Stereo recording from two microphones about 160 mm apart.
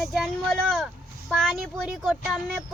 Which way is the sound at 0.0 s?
Centre (ahead or behind).